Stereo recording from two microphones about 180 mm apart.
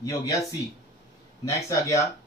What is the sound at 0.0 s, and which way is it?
Speech, 20° left (ahead or behind).